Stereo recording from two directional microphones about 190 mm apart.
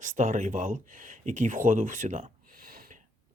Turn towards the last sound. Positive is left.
turn(degrees=-45)  # may be behind; listen again after turning